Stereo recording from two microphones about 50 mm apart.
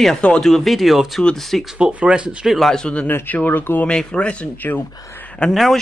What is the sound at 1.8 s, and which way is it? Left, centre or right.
Speech, right.